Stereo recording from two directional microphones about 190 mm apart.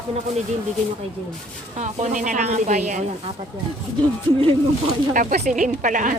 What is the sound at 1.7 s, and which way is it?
Speech, 35° right (ahead or behind).